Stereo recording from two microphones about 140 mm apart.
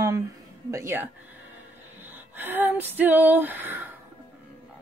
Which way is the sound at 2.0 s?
15° right (ahead or behind).